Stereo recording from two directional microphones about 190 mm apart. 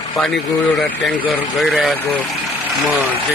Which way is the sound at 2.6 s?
5° right (ahead or behind).